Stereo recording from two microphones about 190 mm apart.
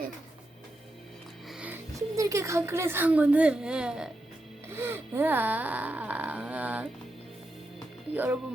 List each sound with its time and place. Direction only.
1.5 s a woman's voice: 5° right (ahead or behind)
4.7 s a sound: 10° right (ahead or behind)
8.1 s speech: 10° right (ahead or behind)